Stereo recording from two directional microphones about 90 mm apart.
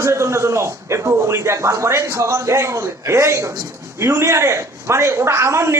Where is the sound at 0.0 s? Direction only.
30° right (ahead or behind).